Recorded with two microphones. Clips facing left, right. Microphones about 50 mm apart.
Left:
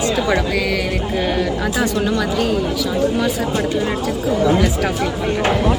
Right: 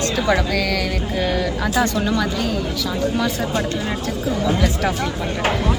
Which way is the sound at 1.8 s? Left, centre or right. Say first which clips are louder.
Left 1 dB; centre.